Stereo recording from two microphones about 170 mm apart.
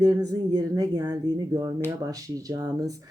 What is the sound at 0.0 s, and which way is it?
Speech, 20° right (ahead or behind).